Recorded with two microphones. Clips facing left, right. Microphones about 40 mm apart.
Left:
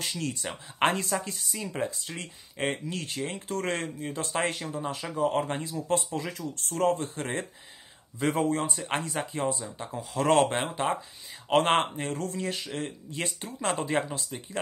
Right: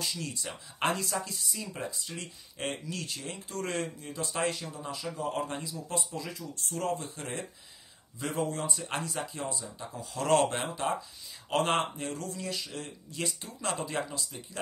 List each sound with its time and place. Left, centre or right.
0.0 s speech: left